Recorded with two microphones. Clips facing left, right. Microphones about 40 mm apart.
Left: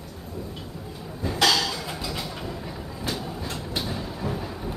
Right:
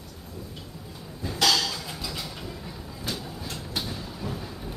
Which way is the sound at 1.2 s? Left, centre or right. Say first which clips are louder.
Left 2 dB; centre.